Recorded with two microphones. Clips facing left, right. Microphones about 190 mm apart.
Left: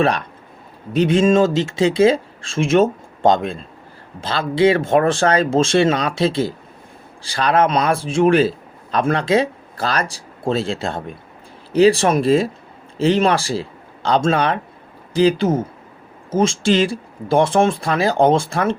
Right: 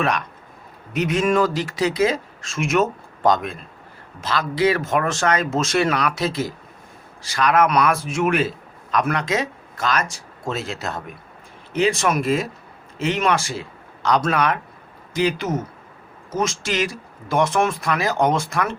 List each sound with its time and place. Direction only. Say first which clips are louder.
0.0 s a man's voice: left 5 dB; 30° left (ahead or behind)